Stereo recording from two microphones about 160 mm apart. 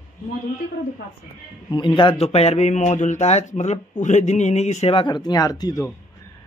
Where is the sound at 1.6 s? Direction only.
30° left (ahead or behind).